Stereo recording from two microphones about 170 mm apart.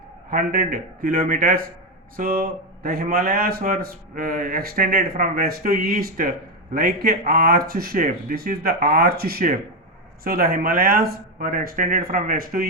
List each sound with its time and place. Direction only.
0.3 s speech: 60° right (ahead or behind)